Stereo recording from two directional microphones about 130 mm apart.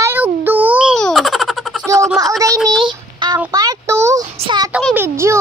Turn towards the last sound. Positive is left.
turn(degrees=-20)  # may be behind; listen again after turning